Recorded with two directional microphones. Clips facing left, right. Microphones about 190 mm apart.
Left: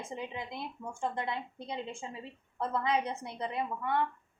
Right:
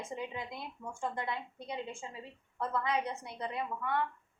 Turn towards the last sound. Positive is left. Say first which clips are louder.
# left 2 dB
turn(degrees=25)  # may be behind; listen again after turning